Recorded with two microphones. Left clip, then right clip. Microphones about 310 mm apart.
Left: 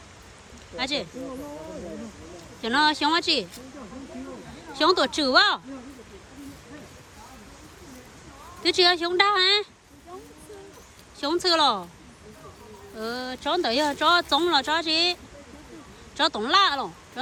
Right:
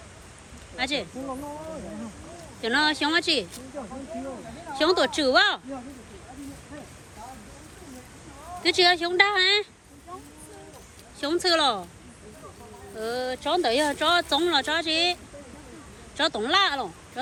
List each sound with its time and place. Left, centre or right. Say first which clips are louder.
0.8 s speech: even; centre
2.6 s speech: left 1 dB; centre
4.8 s speech: left 1 dB; centre
8.6 s speech: even; centre
11.2 s speech: left 1 dB; centre
13.0 s speech: right 3 dB; centre